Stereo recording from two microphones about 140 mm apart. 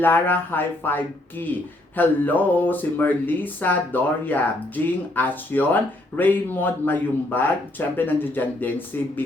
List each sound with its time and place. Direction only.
0.0 s speech: 15° left (ahead or behind)